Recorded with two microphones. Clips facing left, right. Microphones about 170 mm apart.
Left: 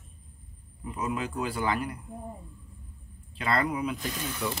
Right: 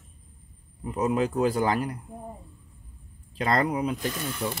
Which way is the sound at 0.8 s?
40° right (ahead or behind).